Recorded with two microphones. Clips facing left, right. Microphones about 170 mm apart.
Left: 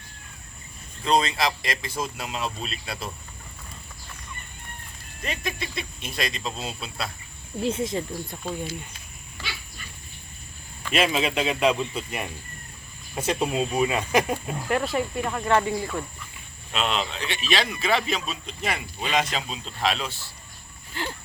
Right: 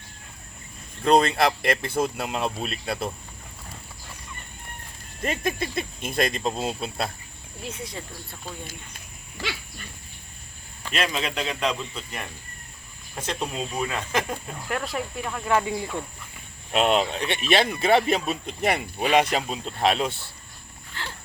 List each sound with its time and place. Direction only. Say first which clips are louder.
1.0 s speech: right 4 dB; 55° right (ahead or behind)
5.2 s speech: right 5 dB; 50° right (ahead or behind)
7.6 s speech: left 10 dB; 25° left (ahead or behind)
10.9 s speech: left 4 dB; 5° left (ahead or behind)
14.7 s speech: left 4 dB; centre (ahead or behind)
16.7 s speech: right 6 dB; 55° right (ahead or behind)
20.9 s a sound: left 5 dB; 15° left (ahead or behind)